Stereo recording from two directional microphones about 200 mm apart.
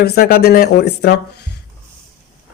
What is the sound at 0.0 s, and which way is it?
Speech, 50° left (ahead or behind).